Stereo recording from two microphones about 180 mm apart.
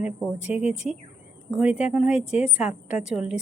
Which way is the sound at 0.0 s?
5° right (ahead or behind).